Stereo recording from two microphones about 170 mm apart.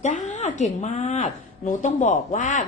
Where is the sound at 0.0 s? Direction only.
45° left (ahead or behind).